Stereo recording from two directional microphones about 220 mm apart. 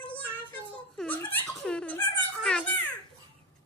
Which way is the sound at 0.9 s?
5° left (ahead or behind).